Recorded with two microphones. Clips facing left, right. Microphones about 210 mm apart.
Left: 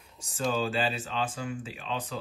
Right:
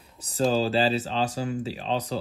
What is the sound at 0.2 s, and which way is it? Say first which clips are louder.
Speech: right 6 dB; 35° right (ahead or behind).